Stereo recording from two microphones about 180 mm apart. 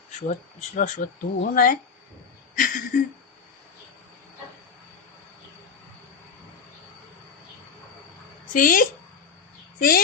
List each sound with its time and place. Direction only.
0.8 s speech: 45° left (ahead or behind)
2.6 s a sound: 50° left (ahead or behind)
8.5 s speech: 50° left (ahead or behind)